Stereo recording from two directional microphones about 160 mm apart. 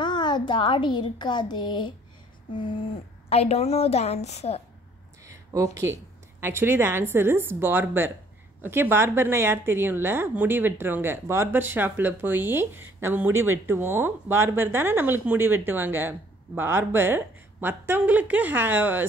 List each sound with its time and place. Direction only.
0.0 s a child's voice: 25° left (ahead or behind)
5.2 s a sound: 20° right (ahead or behind)
6.4 s a woman's voice: 15° right (ahead or behind)